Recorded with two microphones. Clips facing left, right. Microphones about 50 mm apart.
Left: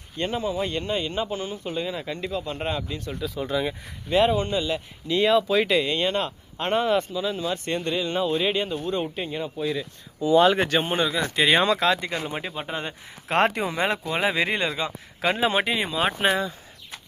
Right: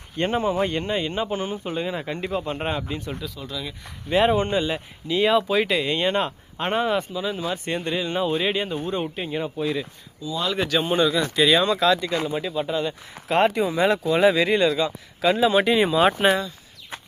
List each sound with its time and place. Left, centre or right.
0.2 s speech: right
0.7 s speech: centre
3.3 s speech: left
4.3 s speech: right
5.0 s speech: centre
9.0 s speech: centre
10.2 s speech: left
10.8 s speech: left
12.5 s speech: left
13.3 s speech: left
13.6 s speech: left
15.7 s speech: centre